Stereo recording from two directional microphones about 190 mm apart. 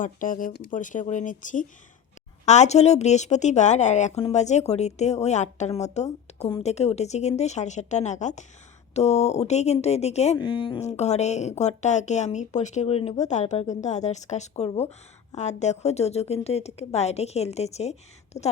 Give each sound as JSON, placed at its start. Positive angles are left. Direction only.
{"t": 0.0, "sound": "speech", "side_deg": 45}